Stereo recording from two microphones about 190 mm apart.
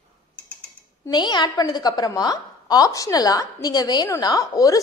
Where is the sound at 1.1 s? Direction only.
20° left (ahead or behind).